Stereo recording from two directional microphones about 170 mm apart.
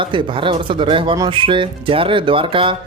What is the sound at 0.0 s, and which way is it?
Speech, 30° right (ahead or behind).